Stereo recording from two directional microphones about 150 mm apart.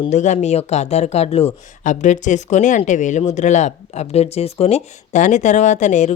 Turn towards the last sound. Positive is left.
turn(degrees=55)  # may be behind; listen again after turning